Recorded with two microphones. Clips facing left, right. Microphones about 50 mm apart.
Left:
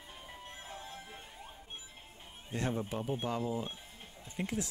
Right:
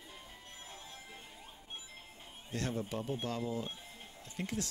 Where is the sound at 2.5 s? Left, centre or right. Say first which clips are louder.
Left 2 dB; left.